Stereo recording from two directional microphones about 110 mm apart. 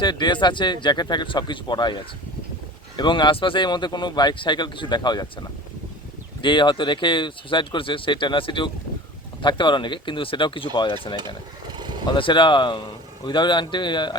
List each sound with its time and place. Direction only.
0.0 s speech: 40° left (ahead or behind)
11.8 s vehicle: 45° right (ahead or behind)
12.0 s speech: 45° left (ahead or behind)